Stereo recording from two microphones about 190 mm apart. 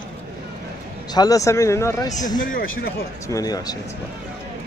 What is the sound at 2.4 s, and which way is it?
Speech, 50° left (ahead or behind).